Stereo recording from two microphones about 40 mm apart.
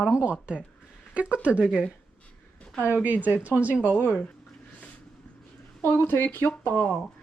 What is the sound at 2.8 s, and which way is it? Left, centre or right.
Speech, right.